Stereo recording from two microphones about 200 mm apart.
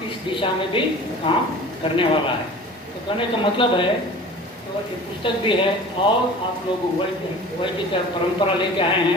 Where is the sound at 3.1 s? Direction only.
25° left (ahead or behind).